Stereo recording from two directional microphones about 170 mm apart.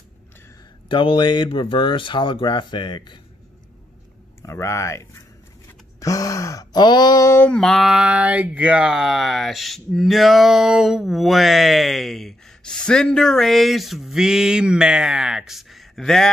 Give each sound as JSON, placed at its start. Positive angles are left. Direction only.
{"t": 0.8, "sound": "speech", "side_deg": 30}
{"t": 4.4, "sound": "speech", "side_deg": 15}
{"t": 5.9, "sound": "a sound", "side_deg": 20}